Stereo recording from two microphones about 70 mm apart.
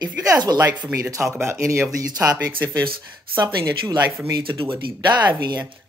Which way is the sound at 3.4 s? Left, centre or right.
Right.